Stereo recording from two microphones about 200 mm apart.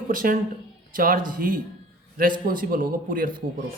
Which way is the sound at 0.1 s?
45° right (ahead or behind).